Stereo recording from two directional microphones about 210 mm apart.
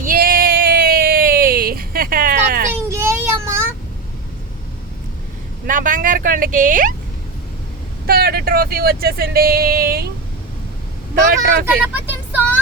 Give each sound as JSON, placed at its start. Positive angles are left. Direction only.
{"t": 0.0, "sound": "a sound", "side_deg": -40}
{"t": 2.9, "sound": "child singing", "side_deg": -10}
{"t": 5.6, "sound": "speech", "side_deg": -40}
{"t": 8.0, "sound": "speech", "side_deg": -45}
{"t": 11.3, "sound": "speech", "side_deg": -10}